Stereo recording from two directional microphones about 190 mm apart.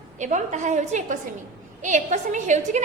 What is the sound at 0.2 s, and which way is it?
A woman's voice, 40° right (ahead or behind).